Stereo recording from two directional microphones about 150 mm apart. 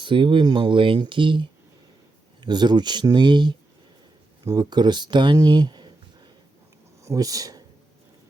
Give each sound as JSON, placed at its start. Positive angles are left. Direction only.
{"t": 0.0, "sound": "speech", "side_deg": -35}